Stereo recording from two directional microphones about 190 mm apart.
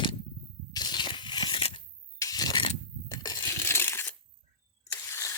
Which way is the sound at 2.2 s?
20° left (ahead or behind).